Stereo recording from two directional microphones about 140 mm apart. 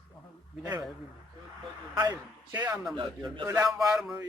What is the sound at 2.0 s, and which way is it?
A man's voice, 25° right (ahead or behind).